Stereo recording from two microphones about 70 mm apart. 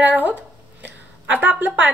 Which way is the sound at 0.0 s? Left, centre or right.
Right.